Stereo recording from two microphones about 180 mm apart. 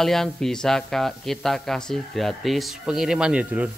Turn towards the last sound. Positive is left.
turn(degrees=-5)  # may be behind; listen again after turning